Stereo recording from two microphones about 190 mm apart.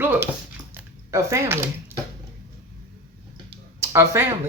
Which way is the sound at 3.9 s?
15° right (ahead or behind).